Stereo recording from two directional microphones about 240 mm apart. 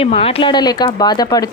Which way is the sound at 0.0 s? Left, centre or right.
Left.